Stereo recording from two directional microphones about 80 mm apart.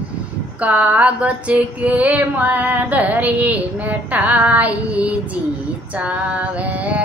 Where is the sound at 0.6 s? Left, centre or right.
Centre.